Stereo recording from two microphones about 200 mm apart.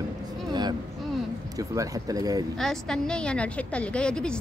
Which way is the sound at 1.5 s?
15° right (ahead or behind).